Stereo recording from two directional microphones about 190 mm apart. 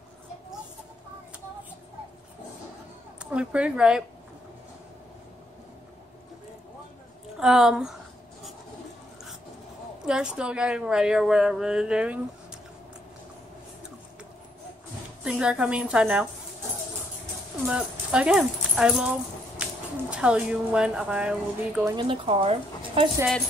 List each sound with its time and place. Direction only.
3.2 s a woman's voice: 5° right (ahead or behind)
7.3 s a woman's voice: 5° right (ahead or behind)
10.0 s a woman's voice: 5° right (ahead or behind)
15.2 s a woman's voice: 5° right (ahead or behind)
17.6 s speech: 5° right (ahead or behind)
21.9 s speech: 25° right (ahead or behind)